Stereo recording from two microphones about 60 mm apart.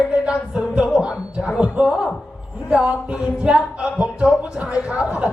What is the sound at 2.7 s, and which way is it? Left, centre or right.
Music, centre.